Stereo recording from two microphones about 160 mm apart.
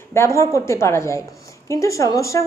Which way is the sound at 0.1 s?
15° left (ahead or behind).